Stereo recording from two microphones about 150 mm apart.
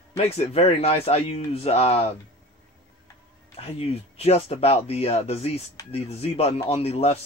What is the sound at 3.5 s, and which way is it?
Speech, 40° left (ahead or behind).